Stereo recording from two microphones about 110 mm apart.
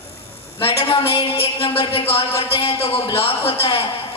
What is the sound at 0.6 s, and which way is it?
A man's voice, 55° left (ahead or behind).